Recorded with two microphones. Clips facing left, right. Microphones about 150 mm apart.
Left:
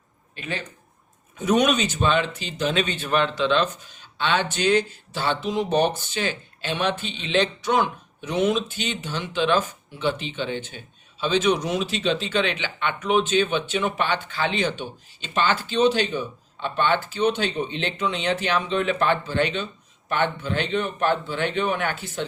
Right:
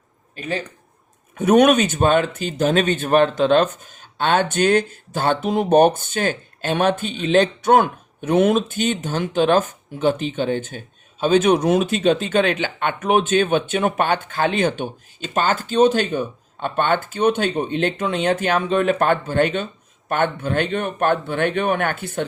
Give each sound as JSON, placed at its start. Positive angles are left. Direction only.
{"t": 0.3, "sound": "speech", "side_deg": -40}
{"t": 1.4, "sound": "speech", "side_deg": -55}